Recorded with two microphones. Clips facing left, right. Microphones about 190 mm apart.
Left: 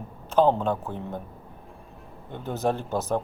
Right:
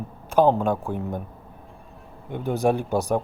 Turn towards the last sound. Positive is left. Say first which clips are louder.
# right 4 dB
turn(degrees=-15)  # may be behind; listen again after turning